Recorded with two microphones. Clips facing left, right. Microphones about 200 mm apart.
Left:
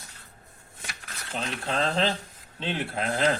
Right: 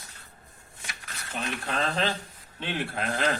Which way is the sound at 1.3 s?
25° left (ahead or behind).